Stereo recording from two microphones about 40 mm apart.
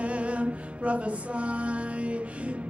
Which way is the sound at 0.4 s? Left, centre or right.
Right.